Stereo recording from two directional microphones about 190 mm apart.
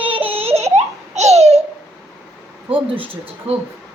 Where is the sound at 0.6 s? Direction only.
35° right (ahead or behind).